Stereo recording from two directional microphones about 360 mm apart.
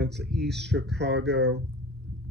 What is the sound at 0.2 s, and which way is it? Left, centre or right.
Speech, right.